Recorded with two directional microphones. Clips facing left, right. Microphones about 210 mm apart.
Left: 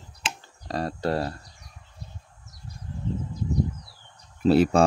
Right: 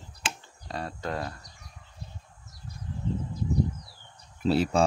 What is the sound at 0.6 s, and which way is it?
Speech, 40° left (ahead or behind).